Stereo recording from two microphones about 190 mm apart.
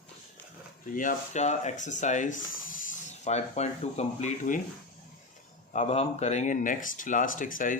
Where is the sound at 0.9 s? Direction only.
40° left (ahead or behind).